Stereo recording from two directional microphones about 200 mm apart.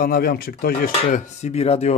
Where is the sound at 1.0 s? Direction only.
35° left (ahead or behind).